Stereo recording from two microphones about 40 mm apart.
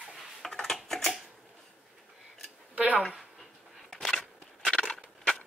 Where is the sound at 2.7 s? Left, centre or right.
Right.